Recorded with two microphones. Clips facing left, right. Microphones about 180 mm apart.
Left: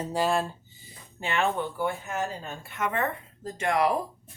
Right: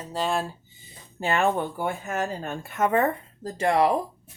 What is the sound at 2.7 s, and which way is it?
Speech, 40° right (ahead or behind).